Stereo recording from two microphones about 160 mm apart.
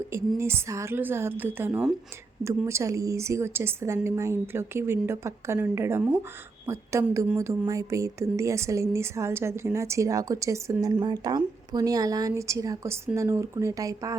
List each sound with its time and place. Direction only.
0.1 s a woman's voice: 15° right (ahead or behind)